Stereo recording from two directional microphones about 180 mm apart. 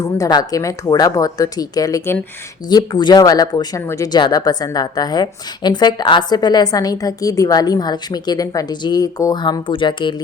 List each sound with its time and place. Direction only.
0.0 s speech: 20° left (ahead or behind)